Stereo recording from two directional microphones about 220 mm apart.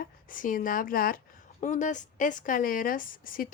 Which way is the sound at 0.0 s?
40° left (ahead or behind).